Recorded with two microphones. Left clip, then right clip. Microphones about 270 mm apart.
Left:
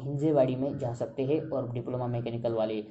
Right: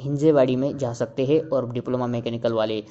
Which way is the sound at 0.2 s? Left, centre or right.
Right.